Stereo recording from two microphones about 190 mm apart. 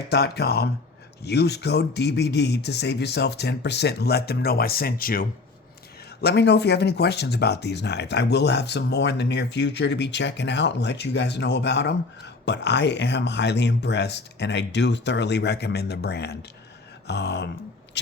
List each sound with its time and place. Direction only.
0.1 s speech: 55° left (ahead or behind)
6.2 s speech: 60° left (ahead or behind)
18.0 s a sound: 65° left (ahead or behind)